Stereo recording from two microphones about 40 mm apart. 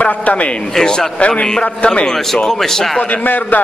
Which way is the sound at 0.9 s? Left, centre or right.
Centre.